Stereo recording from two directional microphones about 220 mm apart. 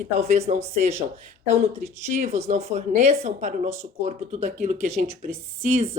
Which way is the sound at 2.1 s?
30° right (ahead or behind).